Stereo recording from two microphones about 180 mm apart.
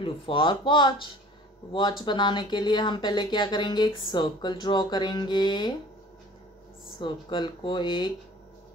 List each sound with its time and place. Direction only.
0.0 s speech: 30° left (ahead or behind)
7.0 s speech: 25° left (ahead or behind)